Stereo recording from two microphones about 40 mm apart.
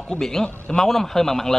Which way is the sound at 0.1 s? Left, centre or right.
Centre.